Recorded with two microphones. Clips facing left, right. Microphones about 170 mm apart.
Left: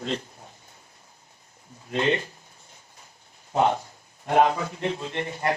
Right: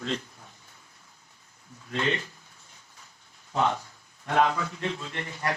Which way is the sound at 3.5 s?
25° left (ahead or behind).